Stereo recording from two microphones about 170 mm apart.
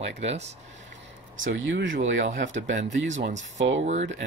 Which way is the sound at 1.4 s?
80° right.